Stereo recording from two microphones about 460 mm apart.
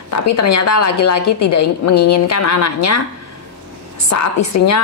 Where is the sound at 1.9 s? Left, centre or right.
Left.